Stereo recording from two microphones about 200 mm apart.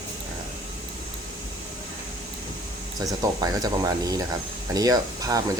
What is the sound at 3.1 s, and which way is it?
Speech, 20° right (ahead or behind).